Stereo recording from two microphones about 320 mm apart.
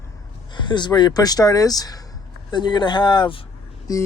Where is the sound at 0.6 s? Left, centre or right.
Centre.